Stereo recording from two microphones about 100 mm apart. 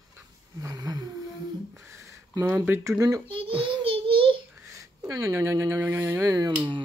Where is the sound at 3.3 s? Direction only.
60° right (ahead or behind).